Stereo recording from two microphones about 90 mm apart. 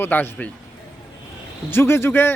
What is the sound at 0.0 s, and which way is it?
Speech, 20° left (ahead or behind).